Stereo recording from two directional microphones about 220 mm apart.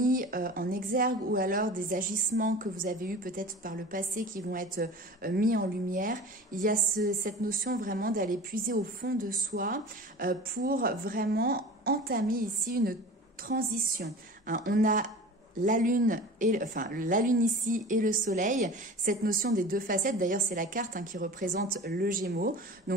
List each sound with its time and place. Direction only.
0.0 s a woman's voice: 40° right (ahead or behind)